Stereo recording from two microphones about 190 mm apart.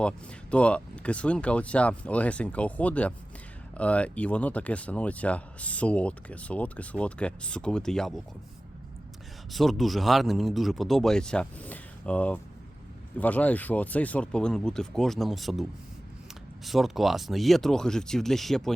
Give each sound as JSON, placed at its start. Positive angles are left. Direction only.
{"t": 0.5, "sound": "speech", "side_deg": 5}
{"t": 9.5, "sound": "speech", "side_deg": 0}
{"t": 16.6, "sound": "speech", "side_deg": 0}